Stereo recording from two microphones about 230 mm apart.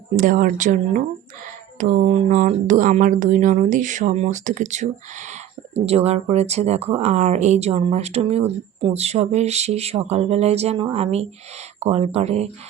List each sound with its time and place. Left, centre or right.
0.2 s speech: right